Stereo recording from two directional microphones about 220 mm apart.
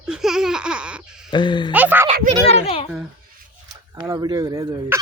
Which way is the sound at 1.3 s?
20° left (ahead or behind).